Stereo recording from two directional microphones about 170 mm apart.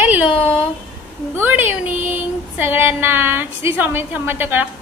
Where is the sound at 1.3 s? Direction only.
10° right (ahead or behind).